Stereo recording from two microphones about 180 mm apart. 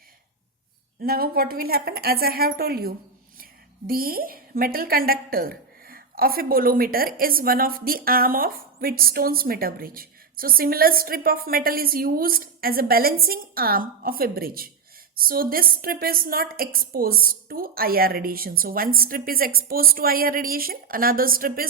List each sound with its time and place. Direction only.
1.0 s a woman's voice: 55° right (ahead or behind)